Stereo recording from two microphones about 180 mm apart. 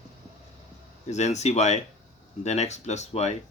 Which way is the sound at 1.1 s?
40° left (ahead or behind).